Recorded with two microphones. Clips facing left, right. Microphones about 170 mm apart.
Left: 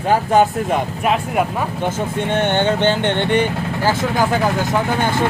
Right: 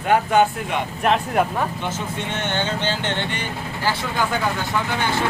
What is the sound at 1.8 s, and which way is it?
Speech, 55° left (ahead or behind).